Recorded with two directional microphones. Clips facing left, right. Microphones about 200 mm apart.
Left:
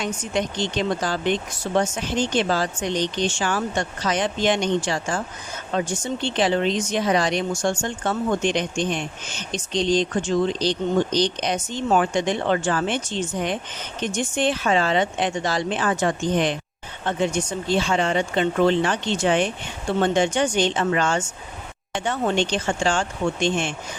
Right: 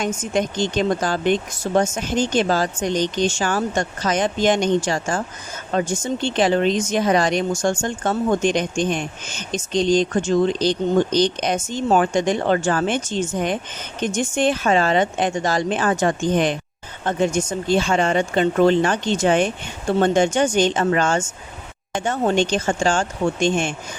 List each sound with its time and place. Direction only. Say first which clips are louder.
0.0 s speech: right 3 dB; 45° right (ahead or behind)